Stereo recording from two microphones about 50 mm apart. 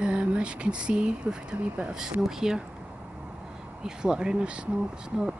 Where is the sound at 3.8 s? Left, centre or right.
Centre.